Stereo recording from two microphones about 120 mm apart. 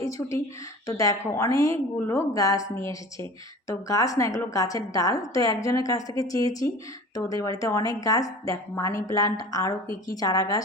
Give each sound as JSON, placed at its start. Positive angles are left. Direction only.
{"t": 0.0, "sound": "a woman's voice", "side_deg": 25}